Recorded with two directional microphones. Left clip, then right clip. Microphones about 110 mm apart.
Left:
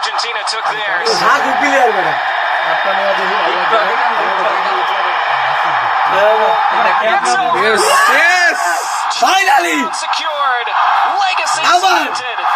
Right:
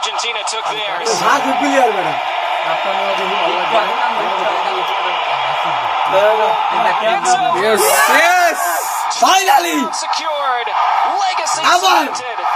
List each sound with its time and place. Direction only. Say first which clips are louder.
7.6 s speech: left 4 dB; 15° right (ahead or behind)
9.2 s speech: even; 25° right (ahead or behind)